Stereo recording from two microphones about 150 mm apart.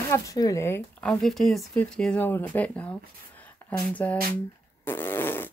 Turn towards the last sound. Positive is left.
turn(degrees=15)  # may be behind; listen again after turning